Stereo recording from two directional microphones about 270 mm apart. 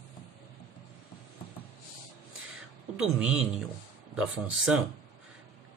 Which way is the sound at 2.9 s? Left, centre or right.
Centre.